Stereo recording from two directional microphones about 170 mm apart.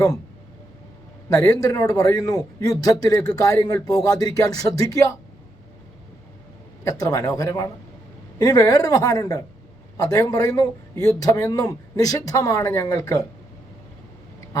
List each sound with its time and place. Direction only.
1.3 s a man's voice: 20° left (ahead or behind)
6.8 s a man's voice: 20° left (ahead or behind)